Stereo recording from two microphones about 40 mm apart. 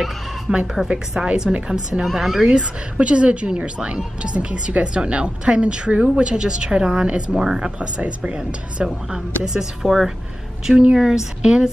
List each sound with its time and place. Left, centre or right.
0.5 s speech: right
2.4 s speech: right
6.1 s speech: right
8.0 s speech: right
9.8 s a woman's voice: centre
10.7 s speech: right
11.0 s speech: centre
11.4 s speech: right